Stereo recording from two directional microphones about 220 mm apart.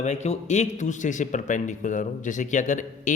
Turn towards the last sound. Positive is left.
turn(degrees=35)  # may be behind; listen again after turning